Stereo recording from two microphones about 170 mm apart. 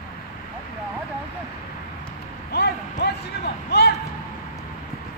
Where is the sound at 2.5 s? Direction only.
70° left (ahead or behind).